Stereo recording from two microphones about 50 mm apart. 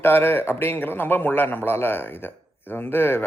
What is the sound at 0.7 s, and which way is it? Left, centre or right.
A man's voice, left.